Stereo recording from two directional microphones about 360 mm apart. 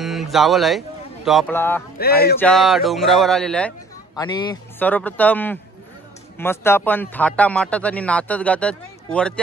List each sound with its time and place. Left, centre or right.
0.0 s a man's voice: centre
2.0 s music: left
2.4 s a man's voice: centre